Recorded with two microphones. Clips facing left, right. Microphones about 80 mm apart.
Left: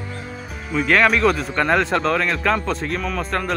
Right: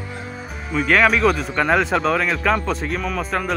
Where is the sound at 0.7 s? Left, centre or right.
Centre.